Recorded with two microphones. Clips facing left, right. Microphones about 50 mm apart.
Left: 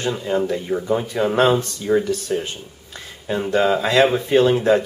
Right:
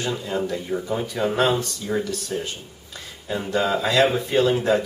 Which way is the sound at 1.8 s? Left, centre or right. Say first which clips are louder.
Left 7 dB; left.